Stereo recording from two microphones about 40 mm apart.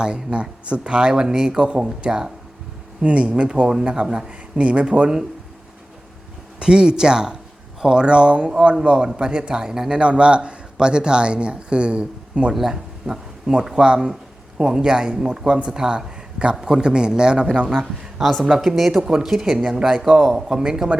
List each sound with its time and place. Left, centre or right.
0.0 s speech: right
3.0 s speech: right
6.6 s speech: right
10.0 s speech: right
12.5 s speech: centre